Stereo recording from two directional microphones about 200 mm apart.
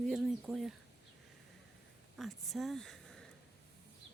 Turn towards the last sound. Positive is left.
turn(degrees=0)  # may be behind; listen again after turning